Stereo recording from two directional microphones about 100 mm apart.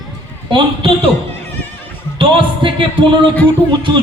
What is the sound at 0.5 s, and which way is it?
Speech, 65° right (ahead or behind).